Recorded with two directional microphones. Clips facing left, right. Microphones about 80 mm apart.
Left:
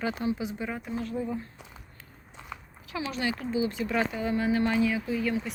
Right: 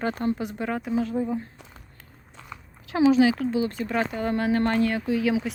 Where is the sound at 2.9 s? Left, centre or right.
Right.